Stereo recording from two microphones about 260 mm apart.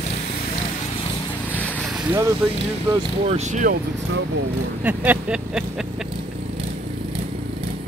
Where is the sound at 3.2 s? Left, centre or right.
Right.